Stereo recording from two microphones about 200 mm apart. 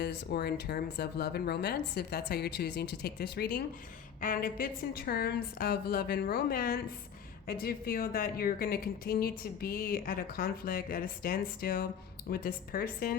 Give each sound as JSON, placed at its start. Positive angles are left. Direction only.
{"t": 0.0, "sound": "a woman's voice", "side_deg": 55}